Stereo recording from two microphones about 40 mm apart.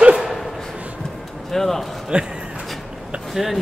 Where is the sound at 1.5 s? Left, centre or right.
Centre.